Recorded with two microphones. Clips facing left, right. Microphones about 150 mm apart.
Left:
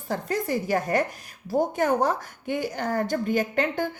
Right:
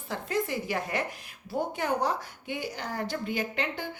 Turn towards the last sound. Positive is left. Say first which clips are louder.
# left 7 dB
turn(degrees=45)  # may be behind; listen again after turning